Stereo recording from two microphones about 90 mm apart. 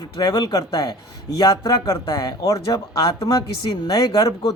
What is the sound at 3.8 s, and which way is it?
Speech, 40° left (ahead or behind).